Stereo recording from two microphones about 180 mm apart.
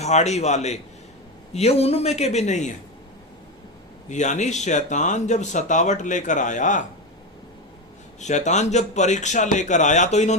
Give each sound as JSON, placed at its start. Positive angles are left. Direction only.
{"t": 0.0, "sound": "speech", "side_deg": 40}
{"t": 4.1, "sound": "speech", "side_deg": 40}
{"t": 8.2, "sound": "speech", "side_deg": 40}